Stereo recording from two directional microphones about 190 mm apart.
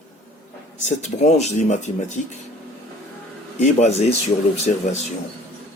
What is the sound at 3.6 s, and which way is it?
Speech, 35° left (ahead or behind).